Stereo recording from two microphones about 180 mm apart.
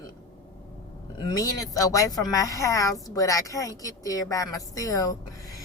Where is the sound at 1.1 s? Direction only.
20° left (ahead or behind).